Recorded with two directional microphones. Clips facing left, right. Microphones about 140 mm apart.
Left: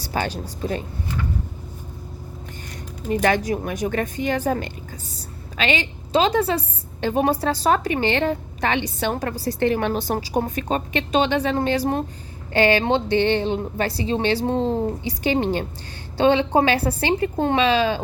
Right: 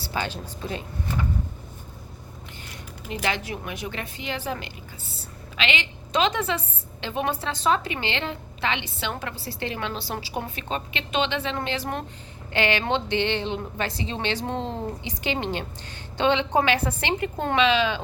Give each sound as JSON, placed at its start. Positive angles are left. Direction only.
{"t": 0.0, "sound": "a woman's voice", "side_deg": 45}
{"t": 3.1, "sound": "a woman's voice", "side_deg": 45}